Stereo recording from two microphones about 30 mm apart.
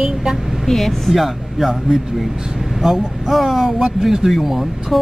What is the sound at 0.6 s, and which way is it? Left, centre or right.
Speech, centre.